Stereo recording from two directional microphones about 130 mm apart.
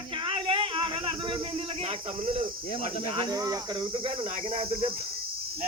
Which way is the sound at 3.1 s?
35° right (ahead or behind).